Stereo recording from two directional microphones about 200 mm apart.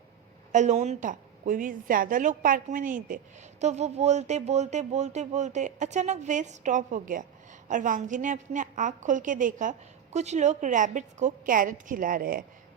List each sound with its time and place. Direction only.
0.5 s a woman's voice: 35° right (ahead or behind)